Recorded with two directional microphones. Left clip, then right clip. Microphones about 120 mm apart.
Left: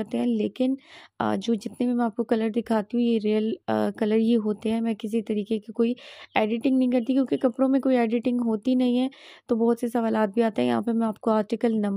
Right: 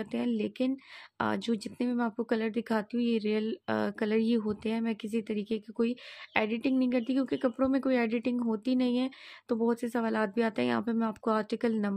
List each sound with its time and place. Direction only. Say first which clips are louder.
0.0 s speech: left 6 dB; 35° left (ahead or behind)